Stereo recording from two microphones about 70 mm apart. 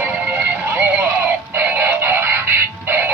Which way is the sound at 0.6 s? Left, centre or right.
Right.